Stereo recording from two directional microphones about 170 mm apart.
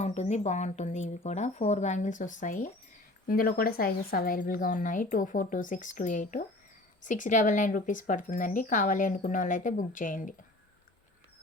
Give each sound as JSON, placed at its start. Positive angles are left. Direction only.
{"t": 0.0, "sound": "speech", "side_deg": 40}
{"t": 3.2, "sound": "speech", "side_deg": 60}